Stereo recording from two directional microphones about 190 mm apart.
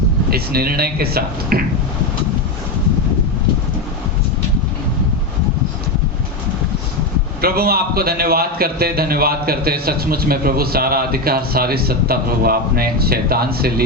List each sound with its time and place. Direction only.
0.3 s a man's voice: 55° right (ahead or behind)
7.4 s a man's voice: 55° right (ahead or behind)